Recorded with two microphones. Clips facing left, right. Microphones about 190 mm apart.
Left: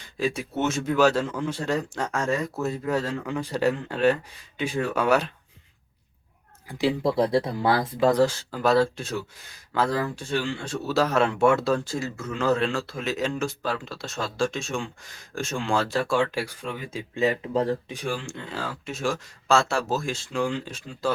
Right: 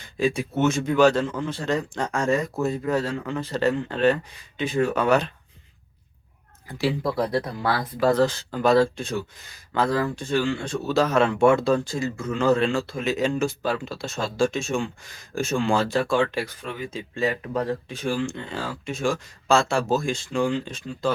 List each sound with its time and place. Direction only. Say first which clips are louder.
0.2 s speech: right 4 dB; centre (ahead or behind)
6.7 s speech: left 1 dB; 20° left (ahead or behind)
8.2 s speech: right 1 dB; 5° left (ahead or behind)
17.2 s speech: left 2 dB; 20° left (ahead or behind)
18.3 s speech: right 2 dB; 5° left (ahead or behind)